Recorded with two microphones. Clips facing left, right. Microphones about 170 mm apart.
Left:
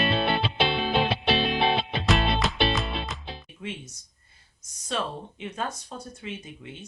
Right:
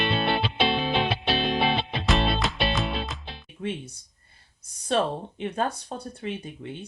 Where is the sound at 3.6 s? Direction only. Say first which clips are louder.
Right 6 dB; 40° right (ahead or behind).